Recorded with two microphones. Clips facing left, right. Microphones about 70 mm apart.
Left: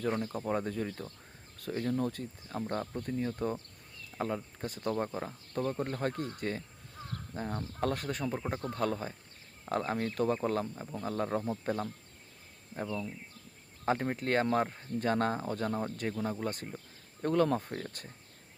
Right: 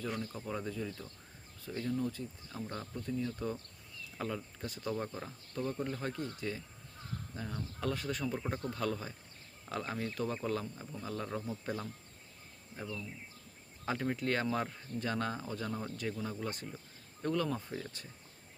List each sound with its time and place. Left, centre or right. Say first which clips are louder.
0.3 s speech: left 6 dB; left
2.5 s speech: left 9 dB; left
4.1 s a sound: left 5 dB; centre
4.6 s speech: left 4 dB; left
5.0 s speech: left 5 dB; left
5.5 s speech: left 4 dB; left